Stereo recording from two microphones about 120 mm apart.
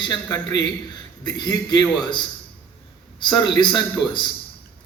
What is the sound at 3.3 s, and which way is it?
Speech, 40° left (ahead or behind).